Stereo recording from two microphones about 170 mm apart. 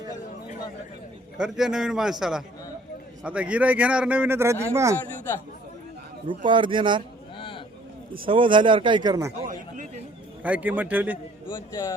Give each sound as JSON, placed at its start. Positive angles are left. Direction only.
{"t": 1.4, "sound": "a man's voice", "side_deg": -5}
{"t": 6.2, "sound": "speech", "side_deg": -30}
{"t": 7.3, "sound": "a sound", "side_deg": 30}
{"t": 8.3, "sound": "speech", "side_deg": -30}
{"t": 10.4, "sound": "speech", "side_deg": -10}
{"t": 11.5, "sound": "speech", "side_deg": 20}